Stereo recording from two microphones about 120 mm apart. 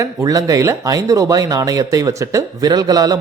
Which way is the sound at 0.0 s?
25° right (ahead or behind).